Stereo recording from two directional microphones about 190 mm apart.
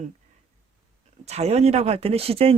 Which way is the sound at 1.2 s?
35° right (ahead or behind).